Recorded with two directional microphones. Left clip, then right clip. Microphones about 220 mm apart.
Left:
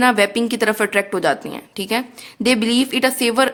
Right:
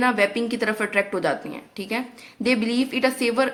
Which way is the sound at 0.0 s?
40° left (ahead or behind).